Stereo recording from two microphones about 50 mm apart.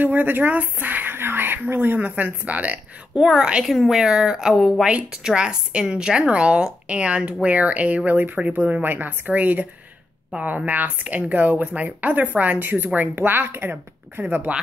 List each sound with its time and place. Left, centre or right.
0.0 s speech: right
2.0 s a woman's voice: right
3.2 s speech: centre
3.6 s speech: centre
4.8 s a woman's voice: centre; by 14.5 s right